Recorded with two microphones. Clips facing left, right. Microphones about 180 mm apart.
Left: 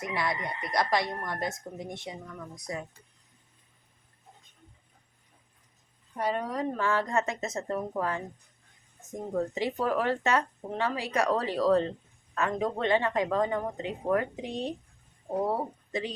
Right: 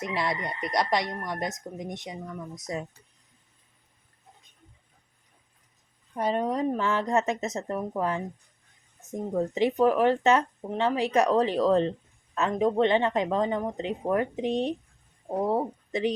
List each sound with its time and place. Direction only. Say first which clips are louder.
0.0 s speech: right 2 dB; 25° right (ahead or behind)
6.1 s speech: right 4 dB; 25° right (ahead or behind)
9.6 s speech: right 10 dB; 20° right (ahead or behind)